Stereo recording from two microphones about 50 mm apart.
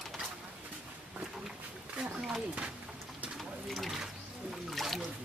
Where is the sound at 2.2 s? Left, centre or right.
Centre.